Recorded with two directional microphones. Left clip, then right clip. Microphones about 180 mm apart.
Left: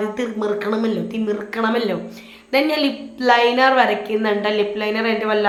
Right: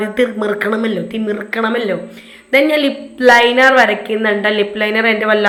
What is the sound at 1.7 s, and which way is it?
A woman's voice, 5° right (ahead or behind).